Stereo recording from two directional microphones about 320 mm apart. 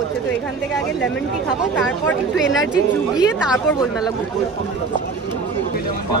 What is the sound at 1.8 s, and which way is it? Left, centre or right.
Speech, centre.